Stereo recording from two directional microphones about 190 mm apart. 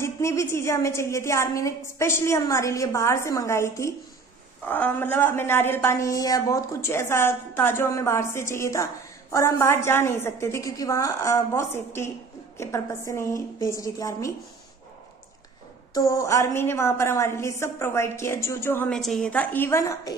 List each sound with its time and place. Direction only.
0.0 s a woman's voice: 15° left (ahead or behind)
15.9 s a woman's voice: 15° left (ahead or behind)